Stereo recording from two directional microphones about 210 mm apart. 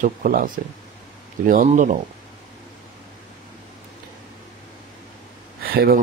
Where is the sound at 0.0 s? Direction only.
40° right (ahead or behind).